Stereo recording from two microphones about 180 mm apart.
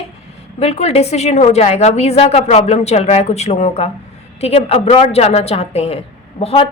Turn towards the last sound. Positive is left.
turn(degrees=30)  # may be behind; listen again after turning